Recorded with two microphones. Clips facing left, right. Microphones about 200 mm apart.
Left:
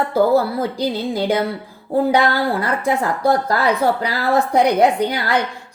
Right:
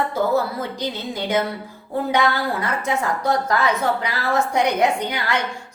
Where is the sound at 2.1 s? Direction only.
35° left (ahead or behind).